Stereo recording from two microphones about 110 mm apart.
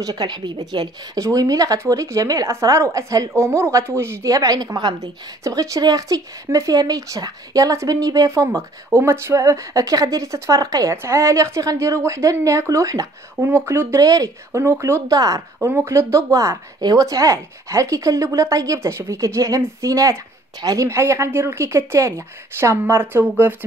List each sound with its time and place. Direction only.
0.0 s speech: 35° right (ahead or behind); by 23.5 s 20° right (ahead or behind)